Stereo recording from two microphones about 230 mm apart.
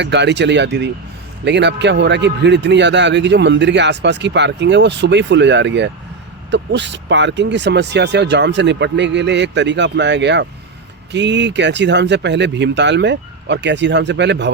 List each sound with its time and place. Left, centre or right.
0.0 s speech: right